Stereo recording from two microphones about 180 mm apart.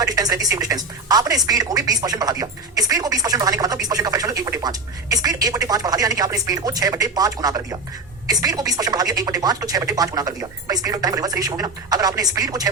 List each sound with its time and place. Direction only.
0.0 s speech: 20° right (ahead or behind)